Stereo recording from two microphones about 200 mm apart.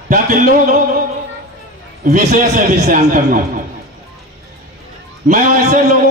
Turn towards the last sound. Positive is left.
turn(degrees=-40)  # may be behind; listen again after turning